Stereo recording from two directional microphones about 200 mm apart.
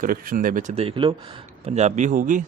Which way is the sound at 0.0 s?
45° right (ahead or behind).